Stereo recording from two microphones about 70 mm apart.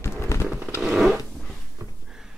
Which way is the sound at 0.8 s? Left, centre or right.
Centre.